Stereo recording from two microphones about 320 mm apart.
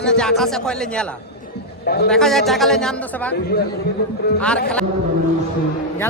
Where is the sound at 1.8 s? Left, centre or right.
Left.